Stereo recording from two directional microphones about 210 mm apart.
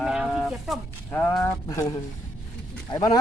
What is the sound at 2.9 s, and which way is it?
Speech, 20° left (ahead or behind).